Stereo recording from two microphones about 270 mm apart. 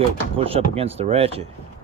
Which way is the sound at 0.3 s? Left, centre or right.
Right.